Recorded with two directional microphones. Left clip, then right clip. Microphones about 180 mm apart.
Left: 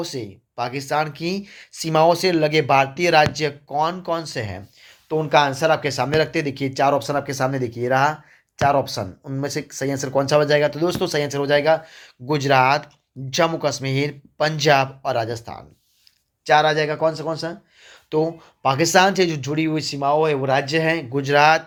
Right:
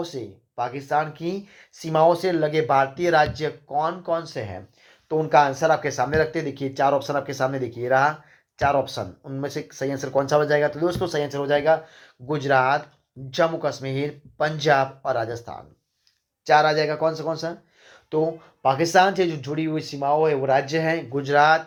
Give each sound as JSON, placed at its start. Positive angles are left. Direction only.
{"t": 0.0, "sound": "speech", "side_deg": 30}
{"t": 16.4, "sound": "speech", "side_deg": 15}